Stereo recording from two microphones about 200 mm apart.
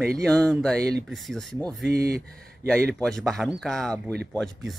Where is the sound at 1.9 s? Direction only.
50° right (ahead or behind).